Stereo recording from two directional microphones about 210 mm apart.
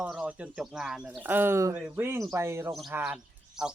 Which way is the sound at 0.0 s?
5° right (ahead or behind).